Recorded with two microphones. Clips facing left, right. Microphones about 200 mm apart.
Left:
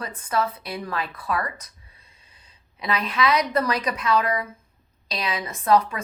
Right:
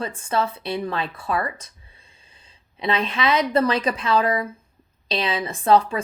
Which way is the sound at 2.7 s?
25° right (ahead or behind).